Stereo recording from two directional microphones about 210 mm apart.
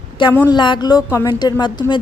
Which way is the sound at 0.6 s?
20° left (ahead or behind).